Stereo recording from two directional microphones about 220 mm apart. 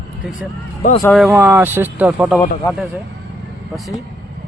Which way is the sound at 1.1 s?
5° right (ahead or behind).